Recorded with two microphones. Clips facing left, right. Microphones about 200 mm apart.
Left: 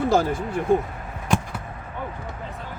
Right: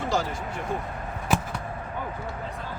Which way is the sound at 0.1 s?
55° left (ahead or behind).